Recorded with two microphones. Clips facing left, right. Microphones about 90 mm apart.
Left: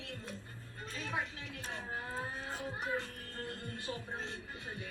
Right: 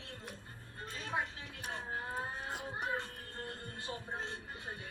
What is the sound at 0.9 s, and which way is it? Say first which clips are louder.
Livestock: right 1 dB; 20° right (ahead or behind).